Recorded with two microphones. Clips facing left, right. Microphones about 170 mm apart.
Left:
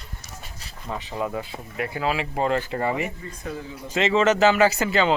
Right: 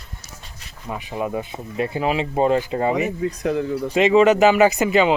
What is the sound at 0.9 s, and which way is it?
Speech, 15° right (ahead or behind).